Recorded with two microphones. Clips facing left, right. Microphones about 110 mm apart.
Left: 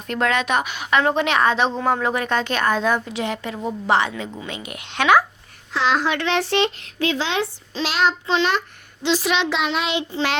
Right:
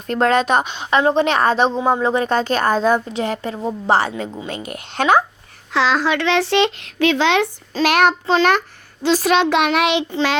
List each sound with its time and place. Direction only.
0.1 s a woman's voice: 35° right (ahead or behind)
5.7 s speech: 90° right; by 7.4 s 75° right (ahead or behind)
7.7 s child singing: 55° right (ahead or behind)
8.3 s a child's voice: 45° right (ahead or behind)
9.6 s child singing: 70° right (ahead or behind)